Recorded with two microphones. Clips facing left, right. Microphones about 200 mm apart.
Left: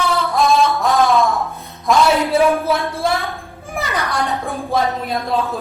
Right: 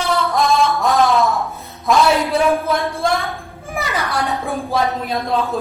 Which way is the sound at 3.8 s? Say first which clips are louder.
Even; centre (ahead or behind).